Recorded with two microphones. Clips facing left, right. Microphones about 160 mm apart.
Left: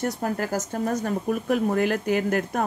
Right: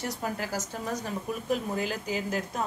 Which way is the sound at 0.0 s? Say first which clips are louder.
Left 6 dB; 50° left (ahead or behind).